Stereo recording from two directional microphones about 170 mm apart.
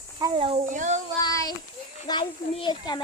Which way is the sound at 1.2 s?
20° left (ahead or behind).